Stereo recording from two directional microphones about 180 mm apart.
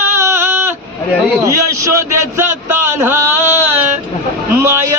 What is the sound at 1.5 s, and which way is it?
Speech, 15° right (ahead or behind).